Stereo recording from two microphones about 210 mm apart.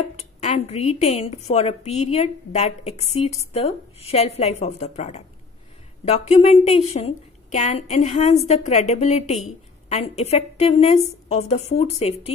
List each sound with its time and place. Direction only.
0.1 s a woman's voice: 30° left (ahead or behind)